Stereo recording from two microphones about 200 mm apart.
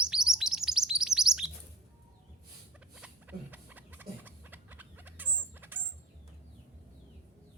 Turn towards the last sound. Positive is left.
turn(degrees=-10)  # may be behind; listen again after turning